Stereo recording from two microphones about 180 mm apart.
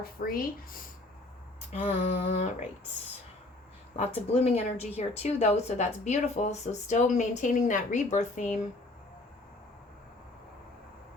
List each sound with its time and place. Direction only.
0.0 s speech: 55° left (ahead or behind)
1.7 s speech: 35° left (ahead or behind)
3.9 s speech: 35° left (ahead or behind)